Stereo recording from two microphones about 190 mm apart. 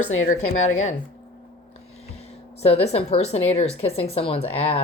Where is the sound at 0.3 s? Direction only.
35° left (ahead or behind).